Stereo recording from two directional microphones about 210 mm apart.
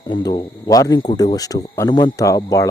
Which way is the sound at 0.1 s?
20° left (ahead or behind).